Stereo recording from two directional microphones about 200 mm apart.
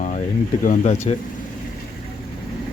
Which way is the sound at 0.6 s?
40° left (ahead or behind).